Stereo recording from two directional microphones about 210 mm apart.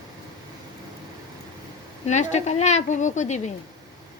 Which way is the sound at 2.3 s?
35° left (ahead or behind).